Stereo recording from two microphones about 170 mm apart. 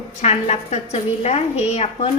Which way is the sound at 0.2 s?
40° left (ahead or behind).